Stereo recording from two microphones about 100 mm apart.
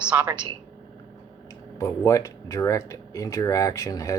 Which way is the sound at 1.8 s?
35° left (ahead or behind).